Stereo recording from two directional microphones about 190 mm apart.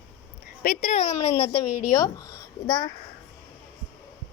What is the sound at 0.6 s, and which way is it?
A woman's voice, 45° left (ahead or behind).